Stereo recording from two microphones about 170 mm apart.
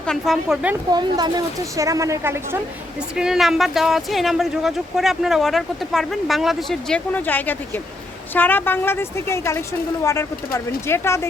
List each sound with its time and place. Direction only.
0.0 s speech: centre (ahead or behind)
0.9 s a woman's voice: 25° right (ahead or behind)
3.2 s a woman's voice: centre (ahead or behind); by 11.3 s 15° left (ahead or behind)